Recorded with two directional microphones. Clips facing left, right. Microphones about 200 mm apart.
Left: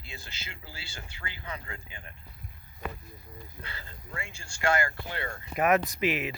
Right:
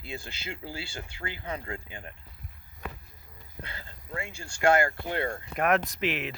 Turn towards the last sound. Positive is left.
turn(degrees=5)  # may be behind; listen again after turning